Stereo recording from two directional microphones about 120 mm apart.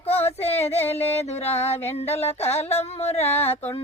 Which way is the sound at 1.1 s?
60° left (ahead or behind).